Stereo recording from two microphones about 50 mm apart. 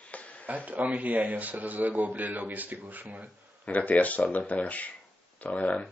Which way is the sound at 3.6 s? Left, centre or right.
Left.